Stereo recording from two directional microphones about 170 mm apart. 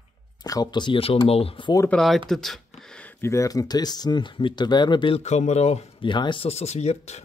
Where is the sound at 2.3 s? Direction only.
Centre (ahead or behind).